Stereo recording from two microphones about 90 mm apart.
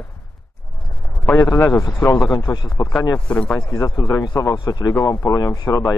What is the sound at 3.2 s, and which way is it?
Speech, 10° left (ahead or behind).